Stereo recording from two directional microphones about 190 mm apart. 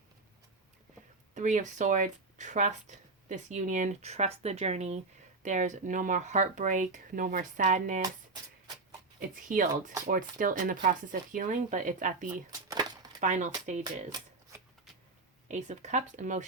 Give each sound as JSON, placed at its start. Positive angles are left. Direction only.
{"t": 1.3, "sound": "speech", "side_deg": -40}
{"t": 8.3, "sound": "music", "side_deg": -20}
{"t": 9.3, "sound": "speech", "side_deg": -40}
{"t": 12.5, "sound": "a sound", "side_deg": -20}
{"t": 13.1, "sound": "speech", "side_deg": -40}
{"t": 14.1, "sound": "speech", "side_deg": -20}
{"t": 15.4, "sound": "speech", "side_deg": -40}